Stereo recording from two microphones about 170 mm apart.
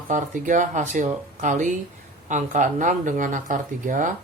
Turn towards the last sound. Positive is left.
turn(degrees=-50)  # may be behind; listen again after turning